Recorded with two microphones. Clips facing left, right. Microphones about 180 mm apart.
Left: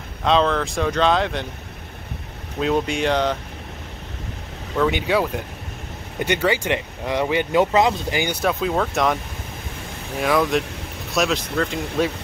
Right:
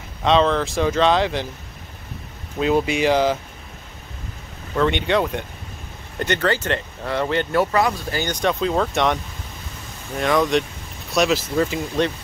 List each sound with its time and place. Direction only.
0.2 s speech: centre (ahead or behind)
2.6 s speech: centre (ahead or behind)
4.7 s speech: 5° left (ahead or behind)